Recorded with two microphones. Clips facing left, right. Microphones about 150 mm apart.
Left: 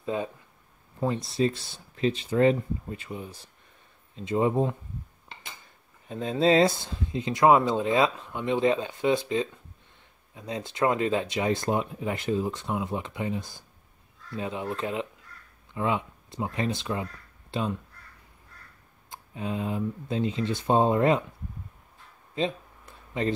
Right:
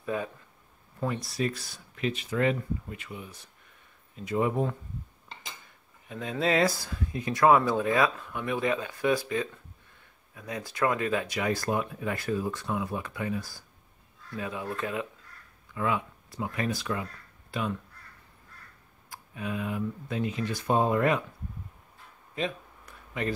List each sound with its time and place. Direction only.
0.0 s speech: 25° left (ahead or behind)
6.0 s speech: 30° left (ahead or behind)
19.0 s speech: 25° left (ahead or behind)
22.3 s a sound: 25° left (ahead or behind)